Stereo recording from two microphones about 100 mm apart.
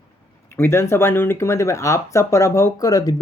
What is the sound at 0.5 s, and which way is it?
Speech, 25° left (ahead or behind).